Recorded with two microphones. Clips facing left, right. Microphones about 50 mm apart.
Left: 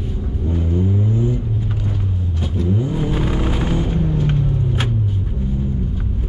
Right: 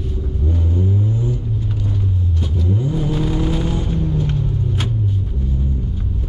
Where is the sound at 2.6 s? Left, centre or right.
Left.